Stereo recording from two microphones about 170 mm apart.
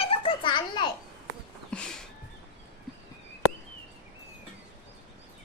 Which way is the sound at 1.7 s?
5° left (ahead or behind).